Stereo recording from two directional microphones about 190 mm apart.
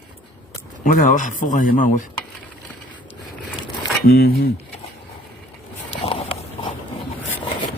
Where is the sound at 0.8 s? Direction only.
45° left (ahead or behind).